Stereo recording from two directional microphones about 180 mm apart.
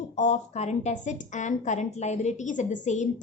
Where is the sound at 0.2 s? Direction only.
40° left (ahead or behind).